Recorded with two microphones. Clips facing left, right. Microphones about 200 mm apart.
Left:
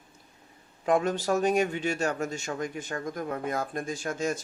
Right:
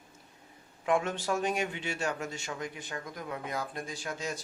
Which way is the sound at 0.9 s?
40° left (ahead or behind).